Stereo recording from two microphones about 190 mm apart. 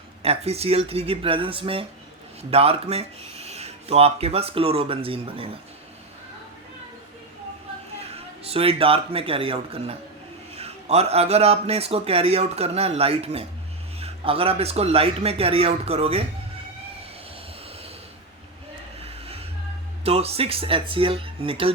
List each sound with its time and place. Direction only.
0.2 s speech: 30° right (ahead or behind)
8.0 s speech: 30° right (ahead or behind)
20.1 s speech: 30° right (ahead or behind)